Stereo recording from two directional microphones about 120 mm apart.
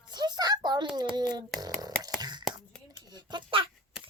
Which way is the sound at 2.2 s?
35° right (ahead or behind).